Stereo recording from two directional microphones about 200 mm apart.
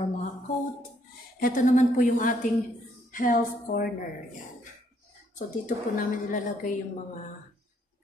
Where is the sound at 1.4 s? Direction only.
40° left (ahead or behind).